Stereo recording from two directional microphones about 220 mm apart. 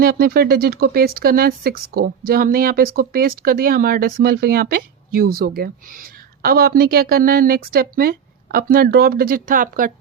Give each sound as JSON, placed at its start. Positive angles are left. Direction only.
{"t": 0.0, "sound": "speech", "side_deg": -40}